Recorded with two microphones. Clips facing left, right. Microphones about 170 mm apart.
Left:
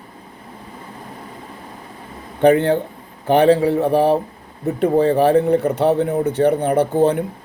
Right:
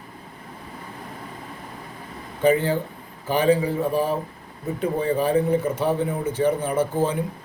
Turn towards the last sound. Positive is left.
turn(degrees=65)  # may be behind; listen again after turning